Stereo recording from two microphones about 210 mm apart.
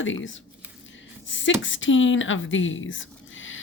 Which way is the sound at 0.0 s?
65° left (ahead or behind).